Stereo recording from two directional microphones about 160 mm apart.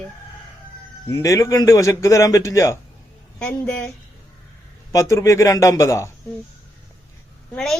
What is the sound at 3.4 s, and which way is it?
Speech, 10° left (ahead or behind).